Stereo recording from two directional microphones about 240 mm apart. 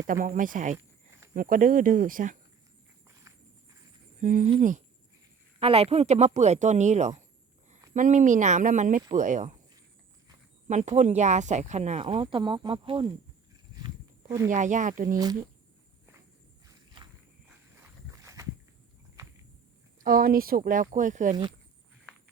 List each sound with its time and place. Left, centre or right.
0.1 s speech: right
4.2 s speech: right
10.7 s speech: right
13.7 s a sound: centre
14.5 s speech: right
15.1 s speech: centre
16.6 s walk: centre
17.7 s a sound: centre
20.0 s speech: right